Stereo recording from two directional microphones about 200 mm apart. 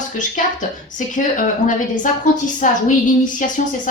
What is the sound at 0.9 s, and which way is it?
A woman's voice, 40° left (ahead or behind).